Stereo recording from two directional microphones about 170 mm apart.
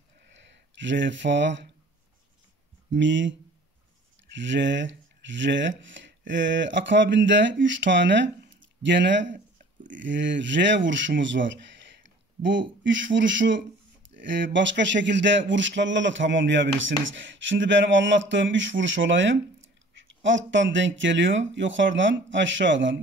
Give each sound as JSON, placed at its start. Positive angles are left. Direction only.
{"t": 0.3, "sound": "speech", "side_deg": -90}
{"t": 2.9, "sound": "speech", "side_deg": -90}